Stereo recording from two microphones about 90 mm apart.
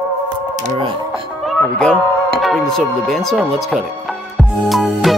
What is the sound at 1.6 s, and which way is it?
Speech, 10° left (ahead or behind).